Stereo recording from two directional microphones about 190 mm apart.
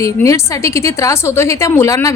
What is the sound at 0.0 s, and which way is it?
A woman's voice, 15° left (ahead or behind).